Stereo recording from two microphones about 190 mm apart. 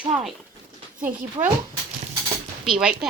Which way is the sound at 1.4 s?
25° right (ahead or behind).